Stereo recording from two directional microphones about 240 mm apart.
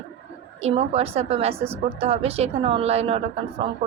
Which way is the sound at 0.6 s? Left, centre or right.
Right.